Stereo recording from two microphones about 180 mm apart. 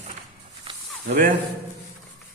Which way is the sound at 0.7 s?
30° right (ahead or behind).